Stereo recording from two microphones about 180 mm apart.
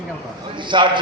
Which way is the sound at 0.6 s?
25° right (ahead or behind).